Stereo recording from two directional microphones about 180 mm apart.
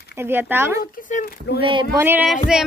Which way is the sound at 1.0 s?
45° left (ahead or behind).